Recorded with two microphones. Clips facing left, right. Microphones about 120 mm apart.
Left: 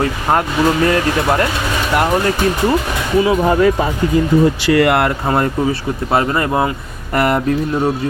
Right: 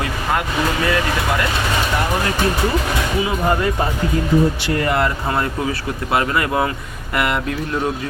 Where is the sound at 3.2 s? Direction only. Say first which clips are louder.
Left 8 dB; 90° left; by 5.1 s 70° left (ahead or behind).